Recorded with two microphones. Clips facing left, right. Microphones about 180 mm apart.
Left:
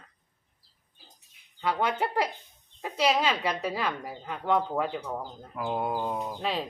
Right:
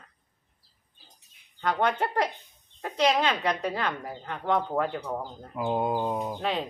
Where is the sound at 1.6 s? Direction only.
5° left (ahead or behind).